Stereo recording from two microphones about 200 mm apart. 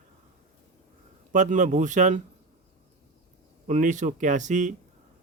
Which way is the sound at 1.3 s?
40° right (ahead or behind).